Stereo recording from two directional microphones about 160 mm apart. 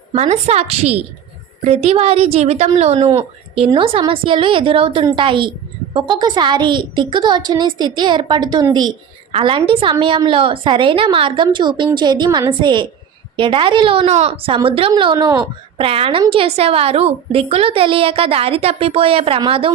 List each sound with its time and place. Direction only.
0.1 s a woman's voice: 40° right (ahead or behind)